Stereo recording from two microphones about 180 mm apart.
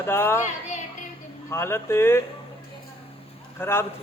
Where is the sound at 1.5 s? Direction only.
15° left (ahead or behind).